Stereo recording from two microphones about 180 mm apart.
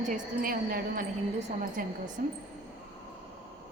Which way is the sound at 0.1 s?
50° right (ahead or behind).